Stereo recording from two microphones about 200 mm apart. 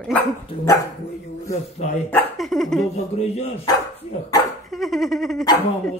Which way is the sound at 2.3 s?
Centre (ahead or behind).